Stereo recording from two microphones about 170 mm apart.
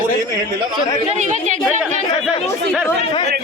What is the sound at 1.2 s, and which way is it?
Speech, 45° right (ahead or behind).